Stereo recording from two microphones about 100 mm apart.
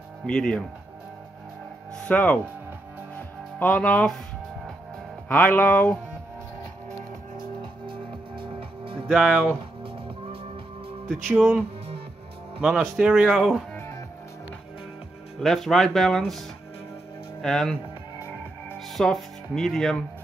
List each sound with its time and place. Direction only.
0.3 s speech: 10° left (ahead or behind)
1.9 s speech: 15° left (ahead or behind)
3.5 s speech: 15° left (ahead or behind)
5.3 s speech: 15° left (ahead or behind)
7.6 s music: 55° right (ahead or behind)
9.0 s speech: 5° right (ahead or behind)
11.3 s speech: 20° right (ahead or behind)
12.8 s speech: 5° right (ahead or behind)
13.7 s music: 25° left (ahead or behind)
15.3 s speech: centre (ahead or behind)
18.8 s speech: centre (ahead or behind)